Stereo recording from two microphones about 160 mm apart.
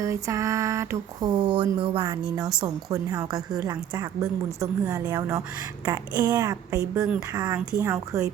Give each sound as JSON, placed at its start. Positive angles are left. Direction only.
{"t": 0.0, "sound": "a woman's voice", "side_deg": -20}